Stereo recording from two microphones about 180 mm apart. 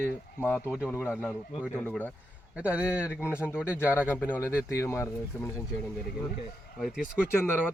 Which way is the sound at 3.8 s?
10° left (ahead or behind).